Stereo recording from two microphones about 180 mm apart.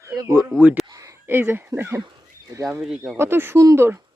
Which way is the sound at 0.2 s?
15° right (ahead or behind).